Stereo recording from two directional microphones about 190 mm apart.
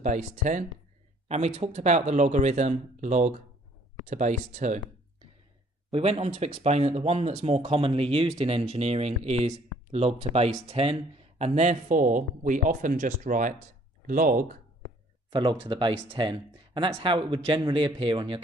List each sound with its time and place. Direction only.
0.0 s speech: 40° right (ahead or behind)
5.9 s speech: 30° right (ahead or behind)
15.3 s speech: 25° right (ahead or behind)